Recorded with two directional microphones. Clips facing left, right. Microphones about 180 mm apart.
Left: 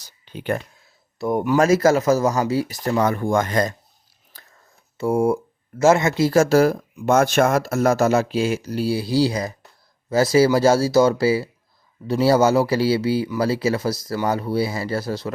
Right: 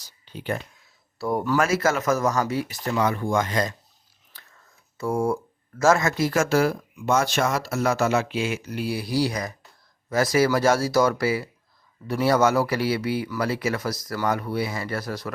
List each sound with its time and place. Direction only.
0.0 s a sound: 60° left (ahead or behind)
1.2 s speech: 20° left (ahead or behind)
1.5 s speech: 35° left (ahead or behind)
4.9 s speech: 25° left (ahead or behind)